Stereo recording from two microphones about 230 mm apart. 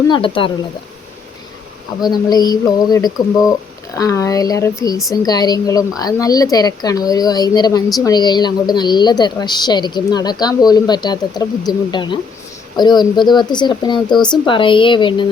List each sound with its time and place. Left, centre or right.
0.1 s speech: left
2.0 s a woman's voice: centre